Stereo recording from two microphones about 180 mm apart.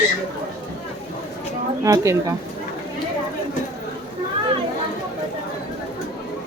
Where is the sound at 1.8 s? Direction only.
15° right (ahead or behind).